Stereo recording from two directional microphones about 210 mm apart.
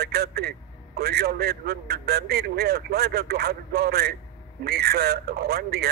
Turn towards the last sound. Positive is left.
turn(degrees=-50)  # may be behind; listen again after turning